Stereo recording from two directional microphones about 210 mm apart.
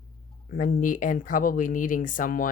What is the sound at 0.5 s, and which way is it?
Speech, 40° left (ahead or behind).